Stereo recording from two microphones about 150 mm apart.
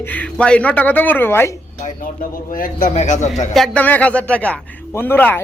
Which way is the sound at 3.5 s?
Centre (ahead or behind).